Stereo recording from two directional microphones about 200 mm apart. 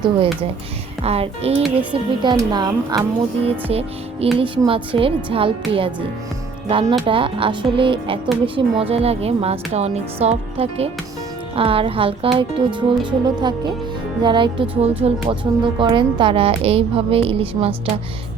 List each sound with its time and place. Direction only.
1.0 s speech: 30° right (ahead or behind)
3.4 s speech: 30° right (ahead or behind)